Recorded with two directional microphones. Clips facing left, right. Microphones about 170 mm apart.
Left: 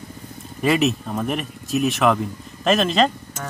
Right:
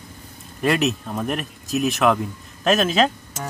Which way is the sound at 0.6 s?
Centre (ahead or behind).